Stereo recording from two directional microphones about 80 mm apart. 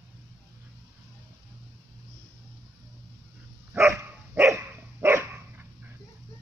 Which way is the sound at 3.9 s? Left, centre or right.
Right.